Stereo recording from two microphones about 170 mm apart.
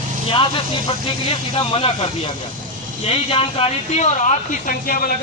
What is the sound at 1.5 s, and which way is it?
Speech, 35° left (ahead or behind).